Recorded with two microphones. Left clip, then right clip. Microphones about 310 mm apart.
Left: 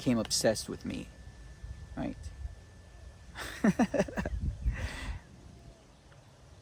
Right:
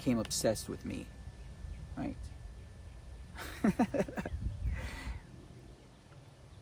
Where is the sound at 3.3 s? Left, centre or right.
Left.